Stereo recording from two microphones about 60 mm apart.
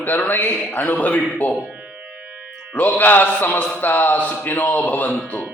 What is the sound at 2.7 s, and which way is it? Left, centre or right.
A man's voice, left.